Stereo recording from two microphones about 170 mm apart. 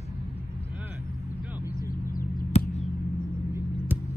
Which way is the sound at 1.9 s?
55° left (ahead or behind).